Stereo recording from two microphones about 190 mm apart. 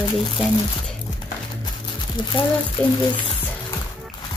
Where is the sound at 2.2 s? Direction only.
25° left (ahead or behind).